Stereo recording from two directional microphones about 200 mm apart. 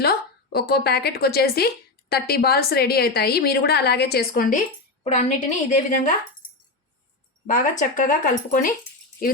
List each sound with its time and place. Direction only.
0.0 s speech: 50° left (ahead or behind)
7.4 s speech: 40° left (ahead or behind)